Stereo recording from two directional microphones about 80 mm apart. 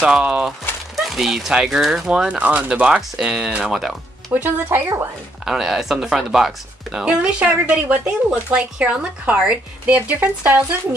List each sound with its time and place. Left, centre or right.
0.0 s speech: centre
4.3 s speech: right
5.4 s speech: centre
9.9 s speech: right